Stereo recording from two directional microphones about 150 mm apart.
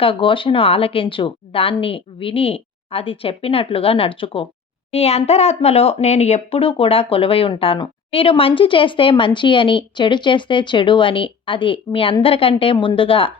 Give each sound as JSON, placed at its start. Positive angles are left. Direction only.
{"t": 0.0, "sound": "speech", "side_deg": 35}